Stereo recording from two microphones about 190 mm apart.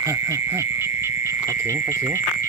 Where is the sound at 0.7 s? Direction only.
10° right (ahead or behind).